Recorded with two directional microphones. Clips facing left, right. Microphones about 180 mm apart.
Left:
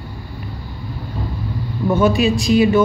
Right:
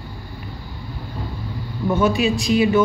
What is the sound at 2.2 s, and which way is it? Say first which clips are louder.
Speech: left 3 dB; 40° left (ahead or behind).